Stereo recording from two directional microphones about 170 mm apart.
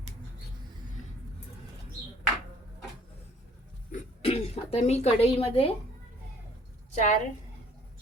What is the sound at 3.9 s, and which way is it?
Throat clearing, 35° left (ahead or behind).